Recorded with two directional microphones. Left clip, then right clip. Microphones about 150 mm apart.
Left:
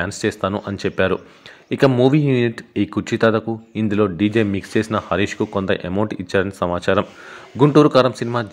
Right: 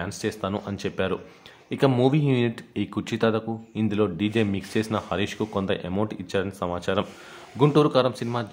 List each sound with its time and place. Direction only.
0.0 s speech: 30° left (ahead or behind)